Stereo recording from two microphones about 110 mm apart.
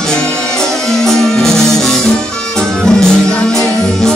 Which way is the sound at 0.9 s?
5° left (ahead or behind).